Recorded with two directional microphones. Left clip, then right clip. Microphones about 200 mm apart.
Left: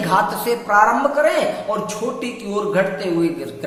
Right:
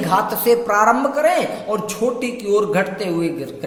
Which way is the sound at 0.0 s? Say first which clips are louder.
Even; 30° right (ahead or behind).